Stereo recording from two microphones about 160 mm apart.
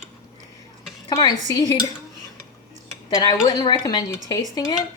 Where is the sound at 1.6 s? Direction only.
25° left (ahead or behind).